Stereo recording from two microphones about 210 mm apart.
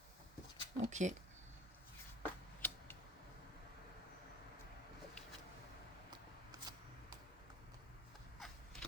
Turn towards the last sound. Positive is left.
turn(degrees=-20)  # may be behind; listen again after turning